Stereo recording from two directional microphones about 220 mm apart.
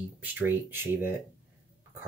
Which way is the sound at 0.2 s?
10° right (ahead or behind).